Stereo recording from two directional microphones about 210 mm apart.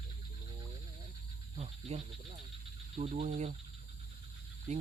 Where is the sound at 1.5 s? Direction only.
30° right (ahead or behind).